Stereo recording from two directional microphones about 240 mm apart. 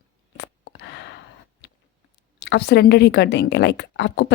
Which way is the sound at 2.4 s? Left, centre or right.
Left.